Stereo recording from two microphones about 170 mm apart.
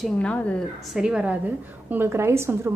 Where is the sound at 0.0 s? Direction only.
5° left (ahead or behind).